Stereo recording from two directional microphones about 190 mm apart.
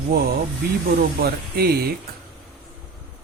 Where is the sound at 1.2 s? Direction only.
55° right (ahead or behind).